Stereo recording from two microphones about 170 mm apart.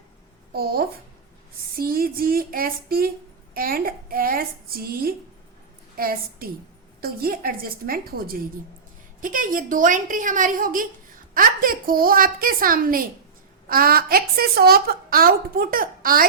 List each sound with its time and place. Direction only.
0.5 s a woman's voice: 65° right (ahead or behind)